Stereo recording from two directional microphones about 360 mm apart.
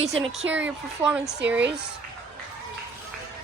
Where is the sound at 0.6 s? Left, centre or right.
Centre.